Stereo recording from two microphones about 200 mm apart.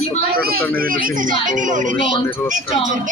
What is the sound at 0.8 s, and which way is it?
Speech, 45° right (ahead or behind).